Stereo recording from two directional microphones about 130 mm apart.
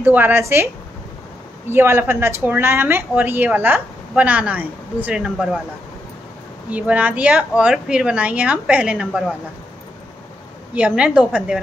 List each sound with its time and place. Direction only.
0.0 s a woman's voice: 15° right (ahead or behind)
1.7 s a woman's voice: 20° right (ahead or behind)
6.7 s a woman's voice: 10° right (ahead or behind)
10.7 s a woman's voice: 10° right (ahead or behind)